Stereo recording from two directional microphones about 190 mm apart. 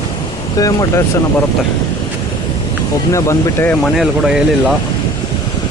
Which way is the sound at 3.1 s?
15° left (ahead or behind).